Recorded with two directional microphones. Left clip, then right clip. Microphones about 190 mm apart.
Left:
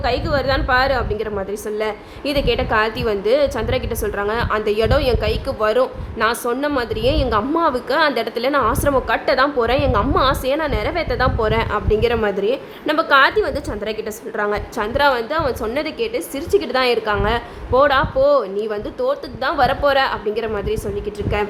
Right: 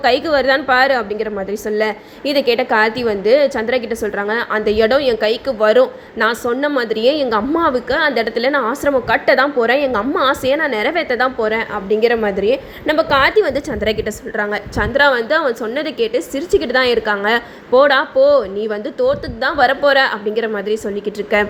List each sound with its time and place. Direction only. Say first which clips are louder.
0.0 s a woman's voice: right 6 dB; 15° right (ahead or behind)
7.9 s a woman's voice: right 2 dB; centre (ahead or behind)